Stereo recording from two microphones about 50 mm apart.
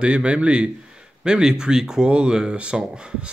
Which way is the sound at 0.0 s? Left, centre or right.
Right.